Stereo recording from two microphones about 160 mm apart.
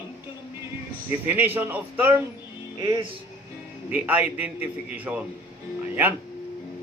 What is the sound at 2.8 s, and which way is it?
Music, 25° right (ahead or behind).